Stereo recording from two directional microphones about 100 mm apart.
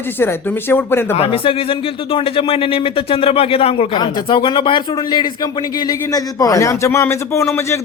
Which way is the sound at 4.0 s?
55° left (ahead or behind).